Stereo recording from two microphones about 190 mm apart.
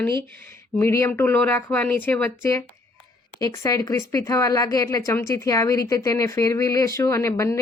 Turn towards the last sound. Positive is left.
turn(degrees=15)  # may be behind; listen again after turning